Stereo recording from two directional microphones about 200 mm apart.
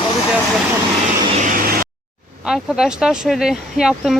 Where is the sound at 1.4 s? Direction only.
45° right (ahead or behind).